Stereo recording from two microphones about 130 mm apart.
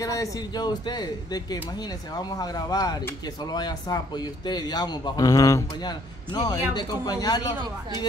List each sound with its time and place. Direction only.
0.0 s a man's voice: 25° left (ahead or behind)